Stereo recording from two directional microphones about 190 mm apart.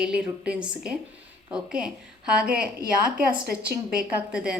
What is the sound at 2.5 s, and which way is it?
A woman's voice, 50° right (ahead or behind).